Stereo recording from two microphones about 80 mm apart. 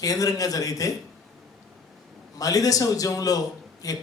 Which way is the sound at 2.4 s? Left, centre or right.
Left.